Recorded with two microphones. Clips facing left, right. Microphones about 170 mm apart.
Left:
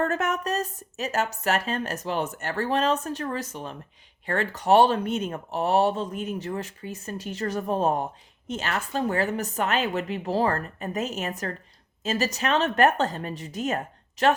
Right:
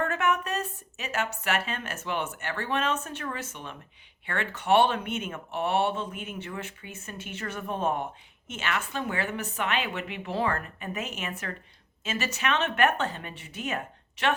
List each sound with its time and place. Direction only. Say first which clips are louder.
0.0 s speech: left 2 dB; 40° left (ahead or behind)